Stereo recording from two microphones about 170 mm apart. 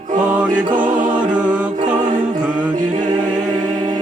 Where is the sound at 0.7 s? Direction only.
50° right (ahead or behind).